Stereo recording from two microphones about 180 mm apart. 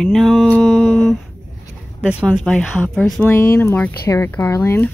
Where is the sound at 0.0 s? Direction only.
Centre (ahead or behind).